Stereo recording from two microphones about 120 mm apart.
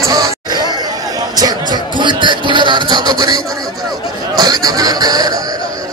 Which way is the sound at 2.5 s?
40° right (ahead or behind).